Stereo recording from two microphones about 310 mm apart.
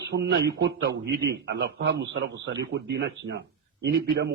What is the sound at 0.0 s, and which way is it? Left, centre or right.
A man's voice, right.